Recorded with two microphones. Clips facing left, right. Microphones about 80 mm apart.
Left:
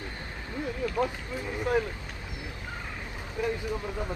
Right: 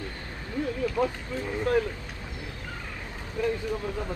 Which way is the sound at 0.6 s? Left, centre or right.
Left.